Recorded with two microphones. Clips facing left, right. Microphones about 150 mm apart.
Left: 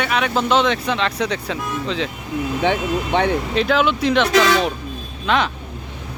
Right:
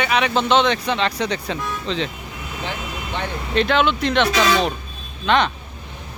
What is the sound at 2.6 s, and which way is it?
Speech, 75° left (ahead or behind).